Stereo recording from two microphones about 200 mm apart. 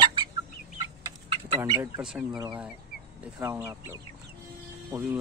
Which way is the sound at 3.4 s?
15° right (ahead or behind).